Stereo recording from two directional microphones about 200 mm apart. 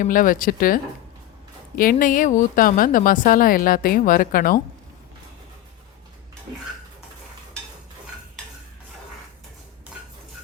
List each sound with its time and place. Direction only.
0.0 s speech: 45° left (ahead or behind)